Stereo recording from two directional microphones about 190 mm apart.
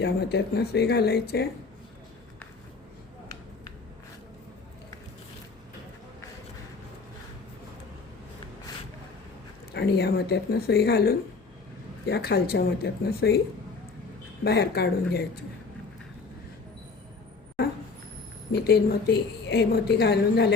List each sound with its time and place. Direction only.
0.0 s a woman's voice: 60° left (ahead or behind)
9.7 s a woman's voice: 65° left (ahead or behind)
14.4 s a woman's voice: 60° left (ahead or behind)
18.5 s a woman's voice: 55° left (ahead or behind)